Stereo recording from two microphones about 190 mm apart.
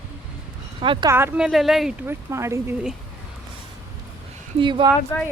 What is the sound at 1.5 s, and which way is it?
Speech, centre (ahead or behind).